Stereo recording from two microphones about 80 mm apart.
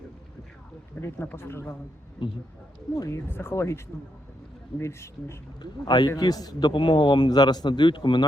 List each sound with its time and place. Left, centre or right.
1.0 s speech: left
2.9 s speech: left
3.2 s speech: left
4.8 s speech: left
5.6 s a man's voice: left
7.3 s a man's voice: left